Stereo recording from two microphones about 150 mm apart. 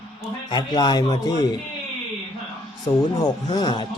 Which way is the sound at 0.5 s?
30° left (ahead or behind).